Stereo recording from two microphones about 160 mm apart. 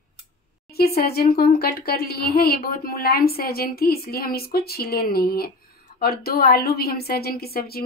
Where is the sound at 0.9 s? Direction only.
75° left (ahead or behind).